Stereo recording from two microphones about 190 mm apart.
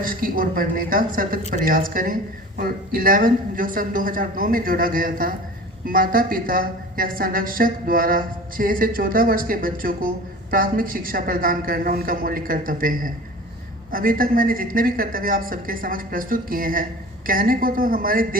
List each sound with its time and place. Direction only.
0.0 s a woman's voice: 45° right (ahead or behind)